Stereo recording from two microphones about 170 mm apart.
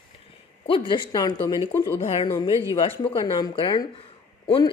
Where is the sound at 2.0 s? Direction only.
35° left (ahead or behind).